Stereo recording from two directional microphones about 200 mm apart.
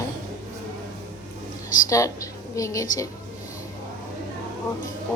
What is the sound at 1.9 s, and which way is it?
Speech, 15° left (ahead or behind).